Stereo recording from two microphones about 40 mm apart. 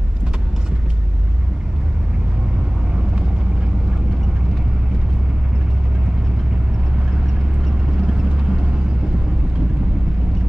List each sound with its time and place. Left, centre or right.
8.0 s vehicle: centre